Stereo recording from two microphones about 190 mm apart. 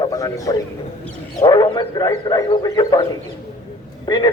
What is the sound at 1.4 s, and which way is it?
Speech, 25° left (ahead or behind).